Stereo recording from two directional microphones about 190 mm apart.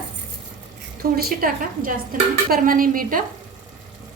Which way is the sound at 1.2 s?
50° right (ahead or behind).